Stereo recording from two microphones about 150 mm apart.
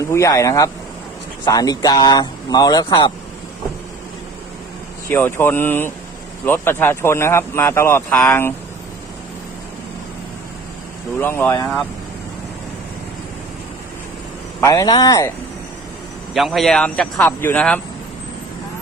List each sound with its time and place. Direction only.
0.1 s speech: 20° left (ahead or behind)
5.0 s speech: 15° left (ahead or behind)
11.2 s speech: 15° left (ahead or behind)
14.6 s speech: 25° left (ahead or behind)
16.3 s speech: centre (ahead or behind)